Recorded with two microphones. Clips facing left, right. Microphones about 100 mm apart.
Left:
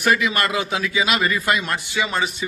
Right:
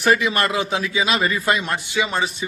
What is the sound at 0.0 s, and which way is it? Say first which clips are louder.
A man's voice: right 1 dB; 35° right (ahead or behind).